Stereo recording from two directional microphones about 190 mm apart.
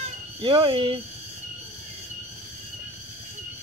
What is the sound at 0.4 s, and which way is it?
Speech, 25° right (ahead or behind).